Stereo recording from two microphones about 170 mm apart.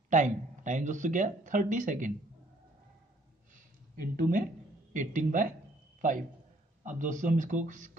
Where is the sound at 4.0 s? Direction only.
55° right (ahead or behind).